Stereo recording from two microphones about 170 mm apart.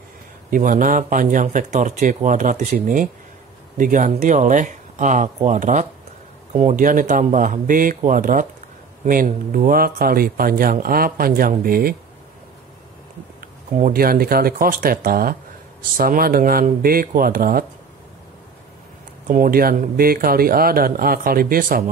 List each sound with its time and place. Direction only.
0.5 s speech: 50° right (ahead or behind)
13.4 s speech: 55° right (ahead or behind)
19.2 s speech: 55° right (ahead or behind)